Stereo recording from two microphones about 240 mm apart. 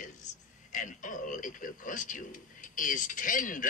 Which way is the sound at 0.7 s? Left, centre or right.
Left.